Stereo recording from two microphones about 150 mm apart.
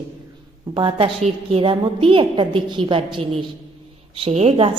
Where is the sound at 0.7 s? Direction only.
35° right (ahead or behind).